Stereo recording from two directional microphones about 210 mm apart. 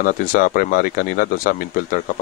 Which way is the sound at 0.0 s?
40° left (ahead or behind).